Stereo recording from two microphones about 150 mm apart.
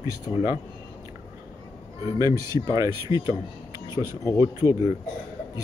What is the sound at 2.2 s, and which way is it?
Speech, 25° right (ahead or behind).